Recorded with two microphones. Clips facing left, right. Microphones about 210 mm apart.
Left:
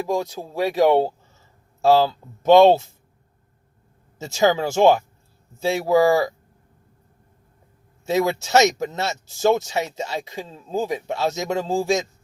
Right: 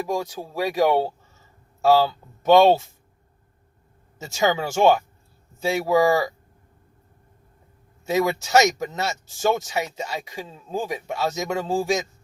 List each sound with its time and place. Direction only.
0.1 s speech: 25° left (ahead or behind)
4.2 s speech: 25° left (ahead or behind)
8.0 s speech: 25° left (ahead or behind)